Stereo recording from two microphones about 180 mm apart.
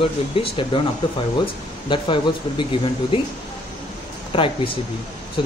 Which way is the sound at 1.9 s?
25° left (ahead or behind).